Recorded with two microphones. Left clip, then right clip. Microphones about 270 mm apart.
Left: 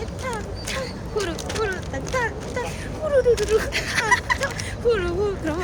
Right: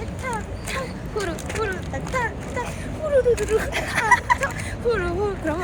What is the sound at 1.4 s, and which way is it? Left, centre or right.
Mechanisms, centre.